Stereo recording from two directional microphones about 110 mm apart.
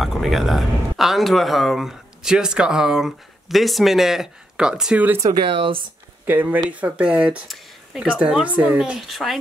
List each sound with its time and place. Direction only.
0.0 s speech: centre (ahead or behind)
5.3 s speech: 50° right (ahead or behind)
6.2 s speech: 15° right (ahead or behind)
7.4 s speech: centre (ahead or behind)